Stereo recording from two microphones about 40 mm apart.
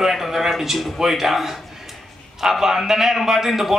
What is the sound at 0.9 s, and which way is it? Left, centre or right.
A man's voice, centre.